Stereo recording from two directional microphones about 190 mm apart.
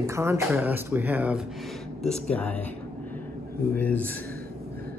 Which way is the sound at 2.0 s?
5° left (ahead or behind).